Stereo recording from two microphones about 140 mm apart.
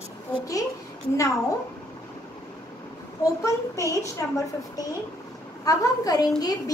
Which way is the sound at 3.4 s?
20° left (ahead or behind).